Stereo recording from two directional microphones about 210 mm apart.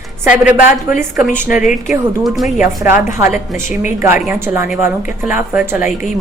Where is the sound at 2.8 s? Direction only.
10° right (ahead or behind).